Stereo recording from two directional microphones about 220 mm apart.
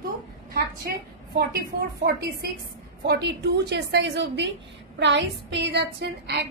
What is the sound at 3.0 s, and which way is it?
A woman's voice, 50° right (ahead or behind).